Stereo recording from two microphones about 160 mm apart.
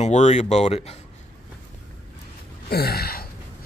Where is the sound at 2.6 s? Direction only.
80° left.